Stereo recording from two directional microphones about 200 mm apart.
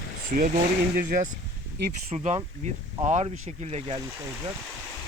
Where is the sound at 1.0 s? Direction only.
40° right (ahead or behind).